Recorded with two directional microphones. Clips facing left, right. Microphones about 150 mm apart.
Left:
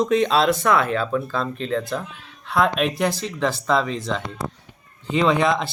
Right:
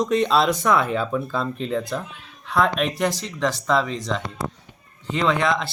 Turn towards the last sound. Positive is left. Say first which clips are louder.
# left 2 dB
turn(degrees=15)  # may be behind; listen again after turning